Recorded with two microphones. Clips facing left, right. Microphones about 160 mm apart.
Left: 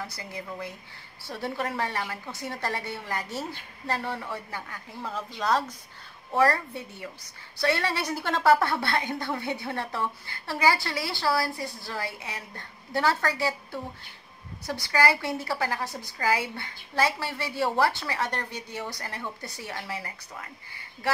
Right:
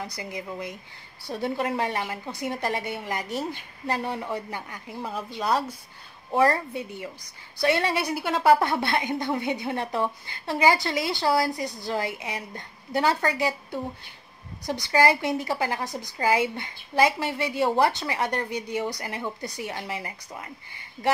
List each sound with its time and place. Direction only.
0.0 s a woman's voice: 15° right (ahead or behind)